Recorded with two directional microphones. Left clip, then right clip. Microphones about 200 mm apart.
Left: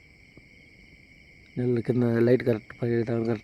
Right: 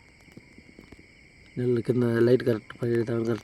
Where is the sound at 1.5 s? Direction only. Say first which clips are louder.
Right 1 dB; centre (ahead or behind).